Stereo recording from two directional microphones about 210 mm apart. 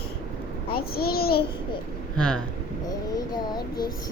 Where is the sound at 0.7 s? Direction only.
45° left (ahead or behind).